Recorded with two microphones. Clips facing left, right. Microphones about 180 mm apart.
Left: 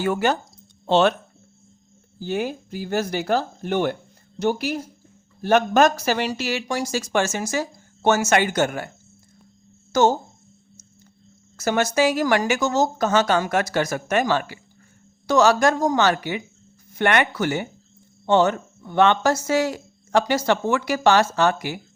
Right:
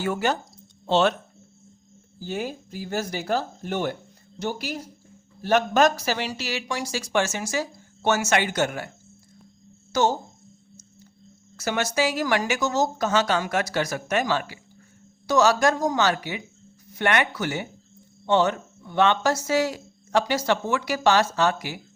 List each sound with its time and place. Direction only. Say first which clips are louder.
0.0 s speech: left 3 dB; 60° left (ahead or behind)
2.2 s speech: left 5 dB; 65° left (ahead or behind); by 8.9 s 50° left (ahead or behind)
9.9 s speech: left 4 dB; 50° left (ahead or behind)
11.5 s speech: left 4 dB; 45° left (ahead or behind)